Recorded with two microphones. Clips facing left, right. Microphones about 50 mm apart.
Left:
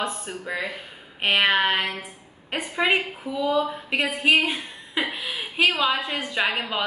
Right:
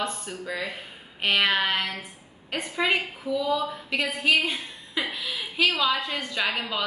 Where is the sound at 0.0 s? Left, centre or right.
Centre.